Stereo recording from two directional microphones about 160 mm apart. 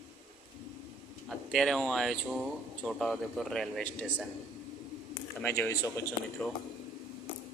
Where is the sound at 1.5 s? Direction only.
Centre (ahead or behind).